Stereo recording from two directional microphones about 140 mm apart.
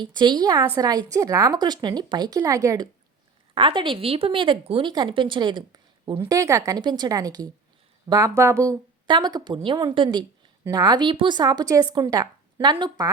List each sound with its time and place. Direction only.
0.0 s a woman's voice: 30° right (ahead or behind)
3.5 s a woman's voice: 40° right (ahead or behind)
6.1 s a woman's voice: 25° right (ahead or behind)